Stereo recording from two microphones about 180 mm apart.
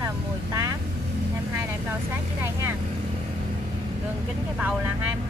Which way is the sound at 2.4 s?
15° right (ahead or behind).